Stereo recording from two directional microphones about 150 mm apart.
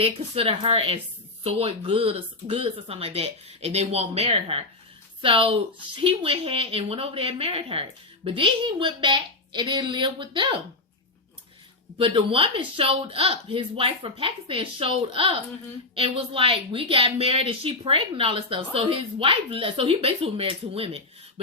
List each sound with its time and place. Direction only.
0.0 s a woman's voice: 40° right (ahead or behind)
11.9 s a woman's voice: 35° right (ahead or behind)